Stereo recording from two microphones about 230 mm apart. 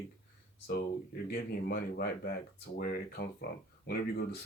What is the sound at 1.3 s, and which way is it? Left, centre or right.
Speech, left.